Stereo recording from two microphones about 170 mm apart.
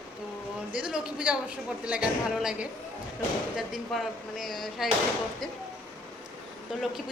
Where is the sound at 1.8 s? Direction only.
5° right (ahead or behind).